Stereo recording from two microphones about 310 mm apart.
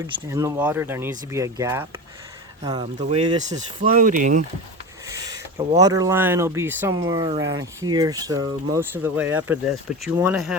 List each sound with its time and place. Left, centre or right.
0.3 s speech: centre; by 4.4 s right
5.0 s speech: centre